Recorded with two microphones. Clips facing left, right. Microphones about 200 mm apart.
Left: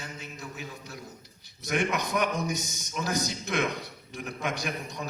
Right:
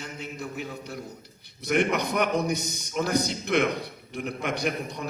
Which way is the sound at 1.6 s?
60° right (ahead or behind).